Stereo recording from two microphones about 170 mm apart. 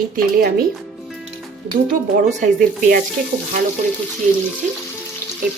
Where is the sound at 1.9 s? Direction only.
50° right (ahead or behind).